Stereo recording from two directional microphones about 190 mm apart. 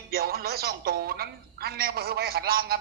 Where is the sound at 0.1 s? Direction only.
55° right (ahead or behind).